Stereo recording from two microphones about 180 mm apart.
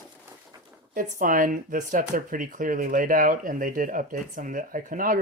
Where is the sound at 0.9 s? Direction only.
50° right (ahead or behind).